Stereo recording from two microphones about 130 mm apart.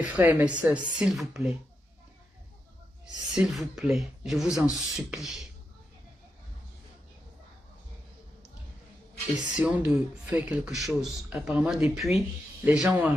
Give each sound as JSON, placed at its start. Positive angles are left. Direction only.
{"t": 0.0, "sound": "speech", "side_deg": -10}
{"t": 3.3, "sound": "speech", "side_deg": -5}
{"t": 9.6, "sound": "speech", "side_deg": -10}